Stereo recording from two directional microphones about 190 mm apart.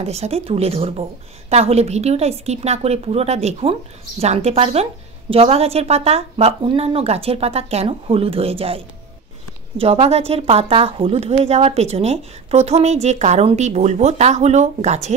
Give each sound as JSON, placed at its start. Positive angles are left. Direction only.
{"t": 0.0, "sound": "a woman's voice", "side_deg": -35}